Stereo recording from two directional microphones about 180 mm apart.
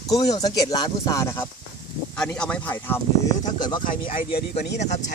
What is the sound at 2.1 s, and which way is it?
Speech, 5° left (ahead or behind).